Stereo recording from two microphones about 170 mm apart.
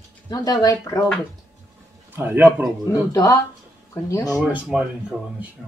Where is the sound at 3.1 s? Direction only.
20° left (ahead or behind).